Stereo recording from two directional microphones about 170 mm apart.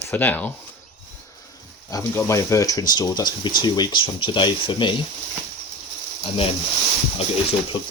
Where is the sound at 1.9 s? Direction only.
20° left (ahead or behind).